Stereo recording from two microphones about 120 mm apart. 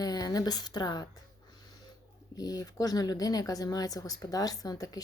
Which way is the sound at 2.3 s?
30° left (ahead or behind).